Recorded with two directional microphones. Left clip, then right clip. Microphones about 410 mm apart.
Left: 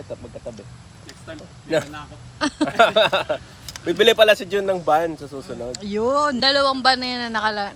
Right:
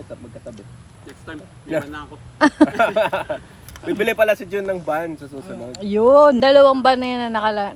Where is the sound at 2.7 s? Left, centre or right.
Left.